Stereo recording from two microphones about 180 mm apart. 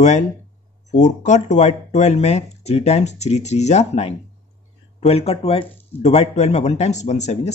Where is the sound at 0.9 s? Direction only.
40° left (ahead or behind).